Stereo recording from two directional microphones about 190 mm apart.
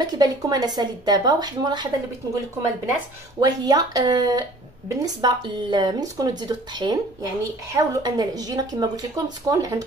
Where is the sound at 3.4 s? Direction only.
20° right (ahead or behind).